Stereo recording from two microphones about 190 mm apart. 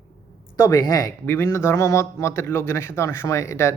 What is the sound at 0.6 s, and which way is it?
Speech, 20° left (ahead or behind).